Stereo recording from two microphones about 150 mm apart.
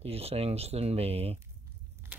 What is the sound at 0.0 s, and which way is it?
Speech, 40° right (ahead or behind).